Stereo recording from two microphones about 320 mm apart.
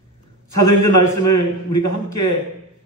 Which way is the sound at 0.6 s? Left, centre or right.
Left.